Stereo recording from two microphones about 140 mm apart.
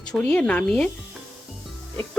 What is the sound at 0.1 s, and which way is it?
Speech, 10° left (ahead or behind).